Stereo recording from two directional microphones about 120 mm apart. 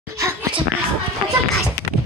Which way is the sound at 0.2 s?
20° right (ahead or behind).